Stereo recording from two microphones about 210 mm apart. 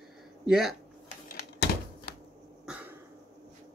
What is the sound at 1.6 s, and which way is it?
Typewriter, 55° left (ahead or behind).